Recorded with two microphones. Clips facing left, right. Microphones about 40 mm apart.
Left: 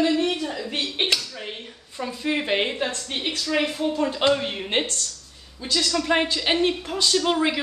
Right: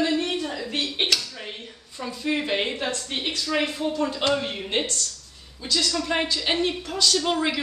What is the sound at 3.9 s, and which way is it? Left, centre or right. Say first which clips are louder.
Speech: left 3 dB; centre.